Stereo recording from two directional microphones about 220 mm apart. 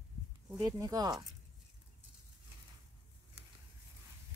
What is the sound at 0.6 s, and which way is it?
Speech, 15° right (ahead or behind).